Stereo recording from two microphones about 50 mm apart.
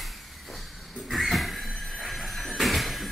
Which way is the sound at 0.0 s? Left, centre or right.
Centre.